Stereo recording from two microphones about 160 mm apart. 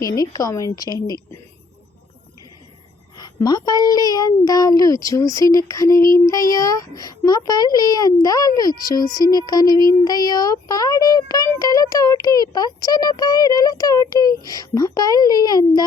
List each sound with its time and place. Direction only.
0.2 s speech: 20° left (ahead or behind)
3.2 s speech: 25° left (ahead or behind)